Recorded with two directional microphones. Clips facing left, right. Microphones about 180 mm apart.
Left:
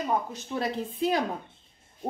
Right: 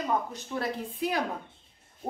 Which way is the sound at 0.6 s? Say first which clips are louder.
Left 3 dB; 20° left (ahead or behind).